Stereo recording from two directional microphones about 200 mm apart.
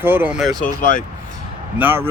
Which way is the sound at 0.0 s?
10° right (ahead or behind).